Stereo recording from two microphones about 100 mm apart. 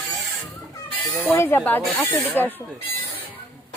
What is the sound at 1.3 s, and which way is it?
Speech, 25° left (ahead or behind).